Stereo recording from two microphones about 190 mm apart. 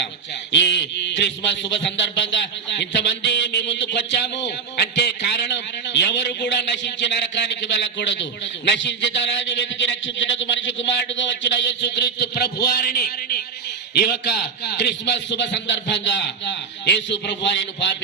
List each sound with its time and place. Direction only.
0.5 s a man's voice: 65° left (ahead or behind)